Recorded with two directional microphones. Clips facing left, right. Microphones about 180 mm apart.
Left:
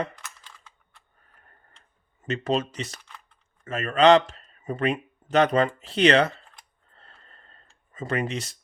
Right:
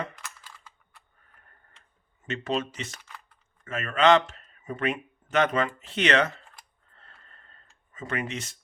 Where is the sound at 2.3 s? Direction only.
40° left (ahead or behind).